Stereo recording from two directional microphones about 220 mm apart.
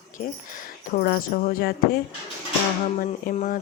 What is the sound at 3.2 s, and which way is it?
Speech, 35° left (ahead or behind).